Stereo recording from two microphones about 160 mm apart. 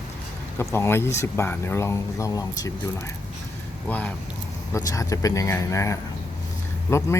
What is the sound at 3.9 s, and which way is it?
Speech, 10° left (ahead or behind).